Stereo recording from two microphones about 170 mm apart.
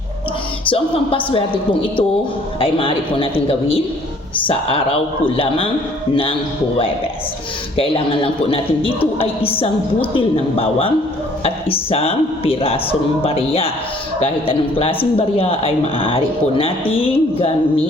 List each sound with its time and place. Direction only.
0.6 s a man's voice: 30° left (ahead or behind)
7.8 s a man's voice: 35° left (ahead or behind)